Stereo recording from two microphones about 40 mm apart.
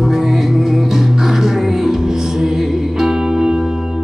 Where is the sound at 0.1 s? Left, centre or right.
Centre.